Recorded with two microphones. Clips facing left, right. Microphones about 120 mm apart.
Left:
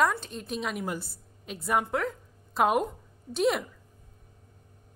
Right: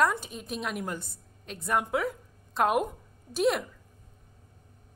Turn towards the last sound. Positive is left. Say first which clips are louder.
# even
turn(degrees=0)  # may be behind; listen again after turning